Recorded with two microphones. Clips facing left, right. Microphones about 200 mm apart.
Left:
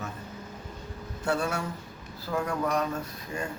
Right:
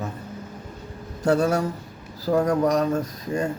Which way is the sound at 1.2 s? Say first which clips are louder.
Right 9 dB; 40° right (ahead or behind).